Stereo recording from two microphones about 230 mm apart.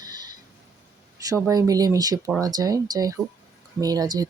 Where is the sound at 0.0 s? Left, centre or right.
Centre.